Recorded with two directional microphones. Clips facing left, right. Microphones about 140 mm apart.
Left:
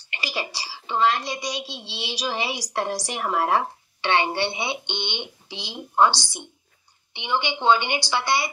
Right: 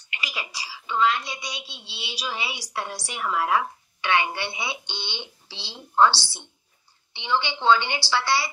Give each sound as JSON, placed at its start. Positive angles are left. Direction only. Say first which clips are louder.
{"t": 0.0, "sound": "a woman's voice", "louder": "left 5 dB", "side_deg": 35}